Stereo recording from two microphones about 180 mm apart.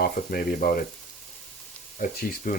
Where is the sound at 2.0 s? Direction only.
50° left (ahead or behind).